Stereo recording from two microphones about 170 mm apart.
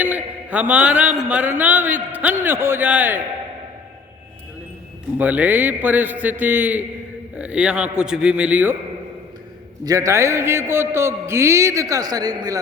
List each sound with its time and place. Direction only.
0.0 s a man's voice: 10° right (ahead or behind)
5.1 s a man's voice: 10° right (ahead or behind)
9.8 s a man's voice: 20° right (ahead or behind)